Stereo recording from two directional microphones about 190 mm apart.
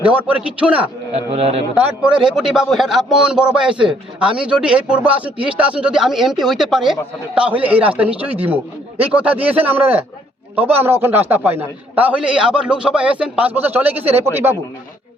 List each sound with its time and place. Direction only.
0.0 s a man's voice: 10° right (ahead or behind)
1.1 s speech: 35° right (ahead or behind)
1.7 s a man's voice: 5° right (ahead or behind)